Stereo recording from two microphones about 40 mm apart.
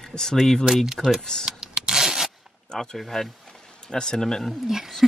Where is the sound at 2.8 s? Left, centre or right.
Centre.